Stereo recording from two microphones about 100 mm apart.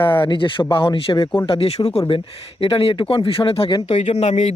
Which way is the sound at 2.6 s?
65° left (ahead or behind).